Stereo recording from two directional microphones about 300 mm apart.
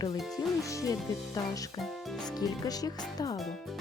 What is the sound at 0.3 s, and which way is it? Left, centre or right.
Speech, centre.